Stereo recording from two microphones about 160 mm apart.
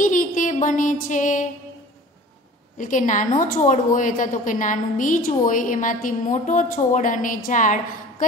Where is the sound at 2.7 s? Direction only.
55° left (ahead or behind).